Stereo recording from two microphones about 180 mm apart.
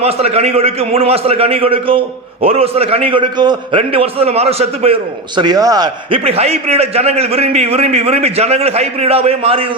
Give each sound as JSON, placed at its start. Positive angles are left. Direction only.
{"t": 0.0, "sound": "a man's voice", "side_deg": -35}
{"t": 5.4, "sound": "a man's voice", "side_deg": -20}